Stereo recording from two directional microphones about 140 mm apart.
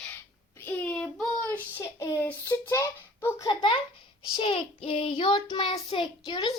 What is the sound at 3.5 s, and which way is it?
A child's voice, 35° left (ahead or behind).